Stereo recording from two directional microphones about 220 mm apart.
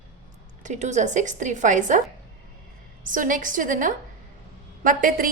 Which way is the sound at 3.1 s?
35° right (ahead or behind).